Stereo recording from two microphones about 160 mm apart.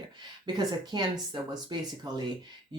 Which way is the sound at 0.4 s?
25° right (ahead or behind).